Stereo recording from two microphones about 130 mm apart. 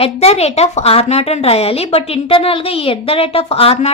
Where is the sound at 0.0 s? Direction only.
50° left (ahead or behind).